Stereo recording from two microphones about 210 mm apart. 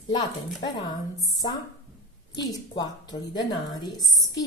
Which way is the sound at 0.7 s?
20° left (ahead or behind).